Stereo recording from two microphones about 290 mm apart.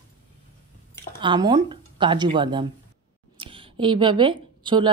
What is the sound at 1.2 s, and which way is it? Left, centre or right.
A woman's voice, centre.